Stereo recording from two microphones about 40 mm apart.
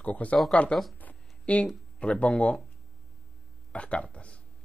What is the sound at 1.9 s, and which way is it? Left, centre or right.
Speech, left.